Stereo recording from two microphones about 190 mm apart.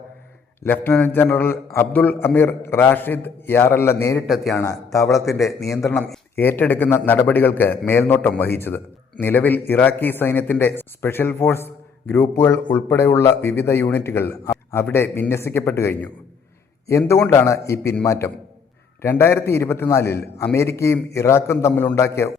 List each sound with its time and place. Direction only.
0.6 s a man's voice: 10° left (ahead or behind)
5.0 s a man's voice: centre (ahead or behind)